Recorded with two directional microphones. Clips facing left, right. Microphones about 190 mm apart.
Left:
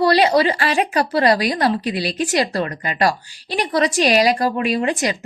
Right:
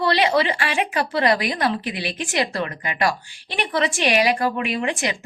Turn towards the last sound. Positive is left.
turn(degrees=40)  # may be behind; listen again after turning